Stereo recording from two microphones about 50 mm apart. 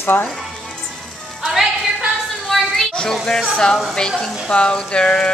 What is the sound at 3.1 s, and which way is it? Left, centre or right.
Speech, centre.